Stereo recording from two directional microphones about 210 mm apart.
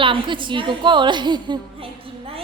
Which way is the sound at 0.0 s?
25° right (ahead or behind).